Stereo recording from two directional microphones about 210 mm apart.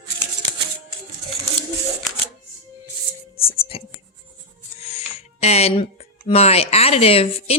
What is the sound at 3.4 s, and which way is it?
Music, 25° left (ahead or behind).